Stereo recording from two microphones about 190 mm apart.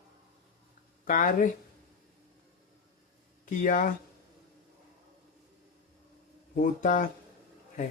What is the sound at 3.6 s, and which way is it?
Speech, 45° left (ahead or behind).